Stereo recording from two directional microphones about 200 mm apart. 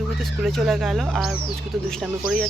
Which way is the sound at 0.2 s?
Centre (ahead or behind).